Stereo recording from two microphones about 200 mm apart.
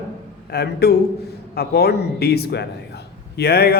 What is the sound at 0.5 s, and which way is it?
A man's voice, 55° left (ahead or behind).